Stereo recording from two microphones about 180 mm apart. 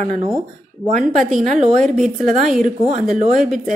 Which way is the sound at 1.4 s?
40° right (ahead or behind).